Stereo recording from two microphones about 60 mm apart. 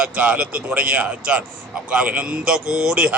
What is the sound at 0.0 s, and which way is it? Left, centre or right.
Speech, right.